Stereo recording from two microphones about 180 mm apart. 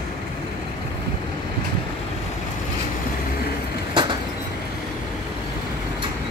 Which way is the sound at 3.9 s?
25° right (ahead or behind).